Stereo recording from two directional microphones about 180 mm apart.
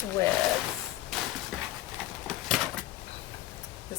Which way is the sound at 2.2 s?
Centre (ahead or behind).